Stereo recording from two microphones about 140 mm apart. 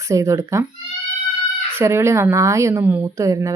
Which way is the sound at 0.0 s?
20° right (ahead or behind).